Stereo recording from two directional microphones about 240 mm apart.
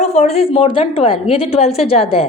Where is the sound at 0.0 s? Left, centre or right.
Left.